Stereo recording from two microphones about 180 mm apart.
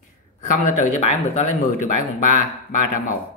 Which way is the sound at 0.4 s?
40° left (ahead or behind).